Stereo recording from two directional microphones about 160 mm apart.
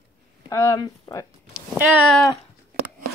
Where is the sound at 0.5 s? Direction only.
20° left (ahead or behind).